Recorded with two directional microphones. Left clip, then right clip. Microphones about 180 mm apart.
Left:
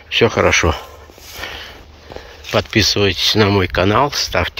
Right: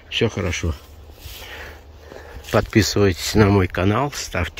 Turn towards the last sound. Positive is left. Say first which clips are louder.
# left 8 dB
turn(degrees=-20)  # may be behind; listen again after turning